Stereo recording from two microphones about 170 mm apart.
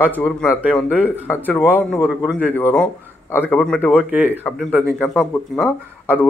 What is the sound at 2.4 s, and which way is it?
A man's voice, 10° left (ahead or behind).